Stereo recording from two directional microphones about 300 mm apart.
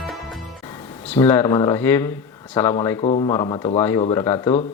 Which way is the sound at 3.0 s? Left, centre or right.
Centre.